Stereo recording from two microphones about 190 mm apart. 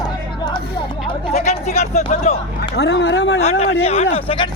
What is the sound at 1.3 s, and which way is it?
Speech, 35° left (ahead or behind).